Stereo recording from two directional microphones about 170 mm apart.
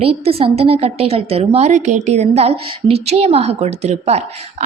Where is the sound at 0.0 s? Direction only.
35° right (ahead or behind).